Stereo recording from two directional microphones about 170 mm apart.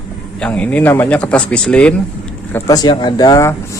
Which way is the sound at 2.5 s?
15° left (ahead or behind).